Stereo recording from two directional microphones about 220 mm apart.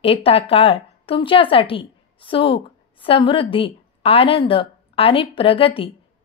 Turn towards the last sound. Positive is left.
turn(degrees=25)  # may be behind; listen again after turning